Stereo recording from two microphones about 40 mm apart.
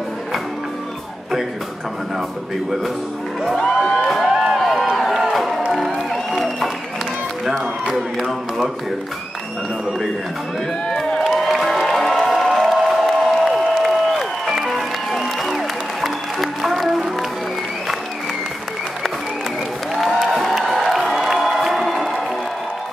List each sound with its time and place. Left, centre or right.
3.5 s music: centre
4.3 s a sound: centre
5.2 s music: centre
7.9 s speech: centre
10.9 s crowd: centre
11.2 s music: centre
19.9 s music: centre